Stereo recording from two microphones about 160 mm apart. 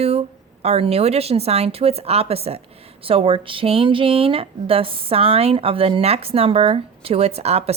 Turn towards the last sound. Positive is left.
turn(degrees=-40)  # may be behind; listen again after turning